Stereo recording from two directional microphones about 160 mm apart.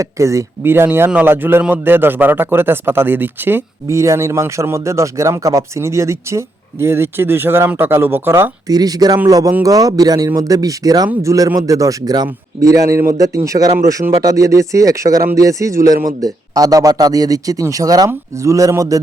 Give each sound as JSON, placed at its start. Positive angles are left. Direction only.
{"t": 0.0, "sound": "a man's voice", "side_deg": -20}